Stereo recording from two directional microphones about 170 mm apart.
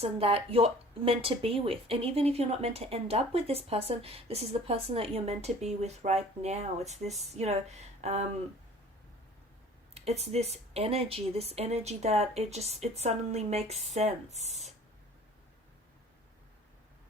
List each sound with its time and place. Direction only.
0.0 s speech: 35° right (ahead or behind)
9.9 s speech: 35° right (ahead or behind)